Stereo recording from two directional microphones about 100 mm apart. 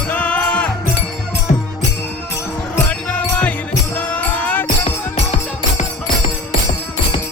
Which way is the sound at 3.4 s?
15° left (ahead or behind).